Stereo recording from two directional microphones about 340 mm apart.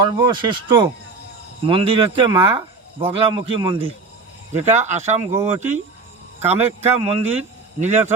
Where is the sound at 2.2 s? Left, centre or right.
Centre.